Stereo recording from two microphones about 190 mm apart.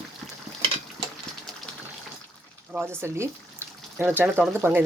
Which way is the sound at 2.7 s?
10° right (ahead or behind).